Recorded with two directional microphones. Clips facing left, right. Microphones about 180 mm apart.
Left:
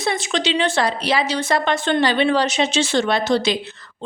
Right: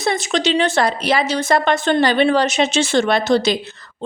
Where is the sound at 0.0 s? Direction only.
40° right (ahead or behind).